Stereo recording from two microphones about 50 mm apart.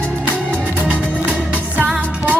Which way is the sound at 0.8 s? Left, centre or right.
Right.